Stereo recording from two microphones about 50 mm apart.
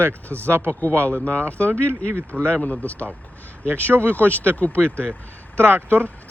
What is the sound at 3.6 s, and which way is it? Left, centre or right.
Speech, right.